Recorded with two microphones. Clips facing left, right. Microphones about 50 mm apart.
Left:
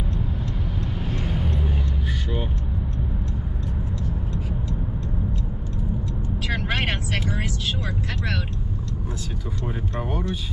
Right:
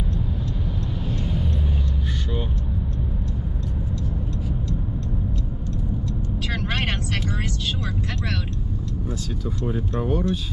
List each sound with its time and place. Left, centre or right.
1.0 s vehicle: left
6.5 s vehicle: centre
10.0 s speech: centre